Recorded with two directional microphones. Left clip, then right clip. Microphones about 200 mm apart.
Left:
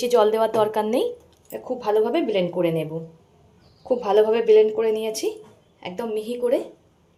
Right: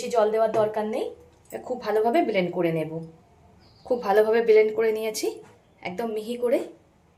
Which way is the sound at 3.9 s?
10° left (ahead or behind).